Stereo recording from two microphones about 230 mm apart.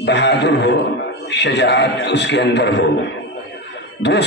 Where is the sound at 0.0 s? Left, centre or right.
Left.